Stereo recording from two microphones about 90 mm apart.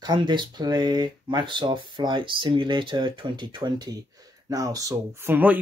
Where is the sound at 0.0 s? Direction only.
60° right (ahead or behind).